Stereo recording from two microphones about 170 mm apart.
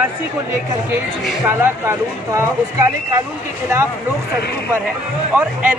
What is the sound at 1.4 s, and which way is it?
Speech, 15° right (ahead or behind).